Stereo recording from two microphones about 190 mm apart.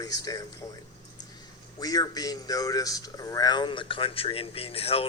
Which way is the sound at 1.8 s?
20° left (ahead or behind).